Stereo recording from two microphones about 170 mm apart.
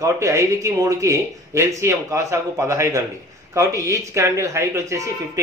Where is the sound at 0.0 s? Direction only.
20° right (ahead or behind).